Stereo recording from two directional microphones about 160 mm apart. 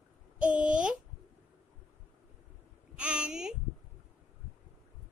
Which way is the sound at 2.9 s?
5° right (ahead or behind).